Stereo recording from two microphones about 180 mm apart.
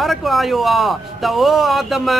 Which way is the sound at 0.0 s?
Centre (ahead or behind).